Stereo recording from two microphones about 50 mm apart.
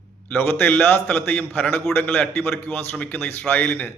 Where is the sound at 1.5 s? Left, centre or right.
Left.